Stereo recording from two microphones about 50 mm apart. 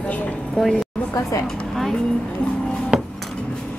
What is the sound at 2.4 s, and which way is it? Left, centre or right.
Music, left.